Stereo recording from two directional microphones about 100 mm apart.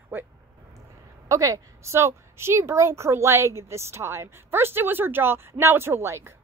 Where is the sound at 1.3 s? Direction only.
35° right (ahead or behind).